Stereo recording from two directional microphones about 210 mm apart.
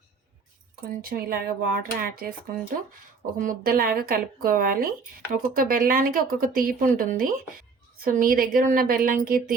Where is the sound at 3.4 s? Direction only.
40° right (ahead or behind).